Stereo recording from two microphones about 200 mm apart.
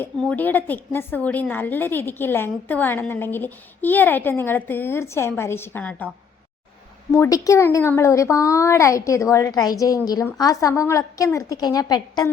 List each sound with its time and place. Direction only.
0.0 s a woman's voice: 5° left (ahead or behind)
7.1 s a woman's voice: 15° left (ahead or behind)